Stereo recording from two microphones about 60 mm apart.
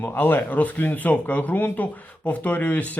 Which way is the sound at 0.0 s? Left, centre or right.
Left.